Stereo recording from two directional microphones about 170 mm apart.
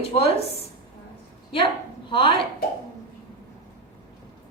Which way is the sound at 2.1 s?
30° left (ahead or behind).